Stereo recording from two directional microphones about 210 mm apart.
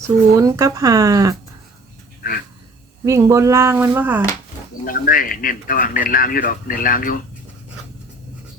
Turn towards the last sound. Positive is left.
turn(degrees=40)  # may be behind; listen again after turning